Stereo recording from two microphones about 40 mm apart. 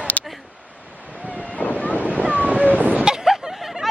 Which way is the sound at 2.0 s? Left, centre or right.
Right.